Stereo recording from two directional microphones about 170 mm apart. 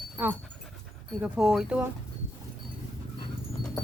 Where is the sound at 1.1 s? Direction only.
5° right (ahead or behind).